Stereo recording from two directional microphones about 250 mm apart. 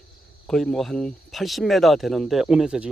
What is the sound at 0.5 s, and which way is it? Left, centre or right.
Speech, centre.